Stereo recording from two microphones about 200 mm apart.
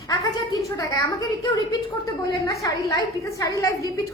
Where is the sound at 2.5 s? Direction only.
15° left (ahead or behind).